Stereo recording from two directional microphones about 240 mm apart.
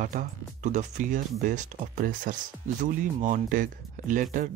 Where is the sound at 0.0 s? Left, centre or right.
Right.